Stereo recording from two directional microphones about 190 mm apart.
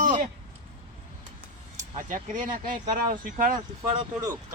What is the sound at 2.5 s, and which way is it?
Speech, 25° right (ahead or behind).